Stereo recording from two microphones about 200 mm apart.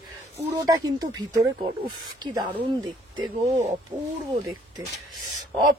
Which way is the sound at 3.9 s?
15° right (ahead or behind).